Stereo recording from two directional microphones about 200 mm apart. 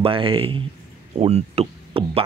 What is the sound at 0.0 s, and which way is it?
Speech, 25° right (ahead or behind).